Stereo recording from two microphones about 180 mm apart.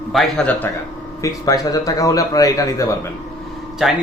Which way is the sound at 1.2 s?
20° left (ahead or behind).